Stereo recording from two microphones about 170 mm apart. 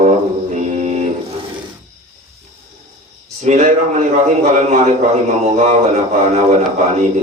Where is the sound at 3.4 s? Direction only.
40° right (ahead or behind).